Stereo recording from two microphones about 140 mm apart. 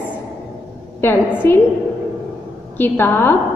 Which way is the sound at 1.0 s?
15° left (ahead or behind).